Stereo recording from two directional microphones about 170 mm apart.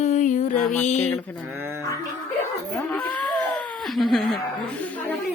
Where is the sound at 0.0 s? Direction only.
45° left (ahead or behind).